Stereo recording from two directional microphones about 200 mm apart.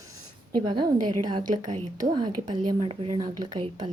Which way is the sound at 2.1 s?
20° right (ahead or behind).